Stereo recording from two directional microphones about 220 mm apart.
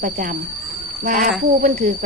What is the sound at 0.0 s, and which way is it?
Speech, 35° right (ahead or behind).